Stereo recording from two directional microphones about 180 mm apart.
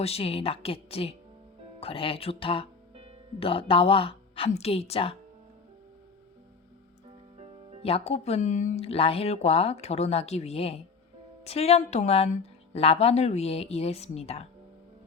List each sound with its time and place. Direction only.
0.0 s a woman's voice: 35° left (ahead or behind)
7.3 s music: 35° right (ahead or behind)
7.8 s a woman's voice: 35° left (ahead or behind)